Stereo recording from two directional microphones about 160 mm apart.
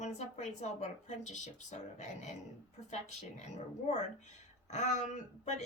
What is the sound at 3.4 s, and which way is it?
Speech, 45° left (ahead or behind).